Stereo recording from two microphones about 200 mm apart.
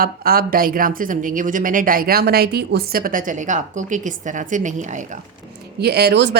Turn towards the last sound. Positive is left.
turn(degrees=-55)  # may be behind; listen again after turning